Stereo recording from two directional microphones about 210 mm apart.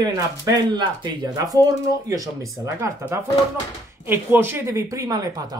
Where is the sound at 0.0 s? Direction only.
20° right (ahead or behind).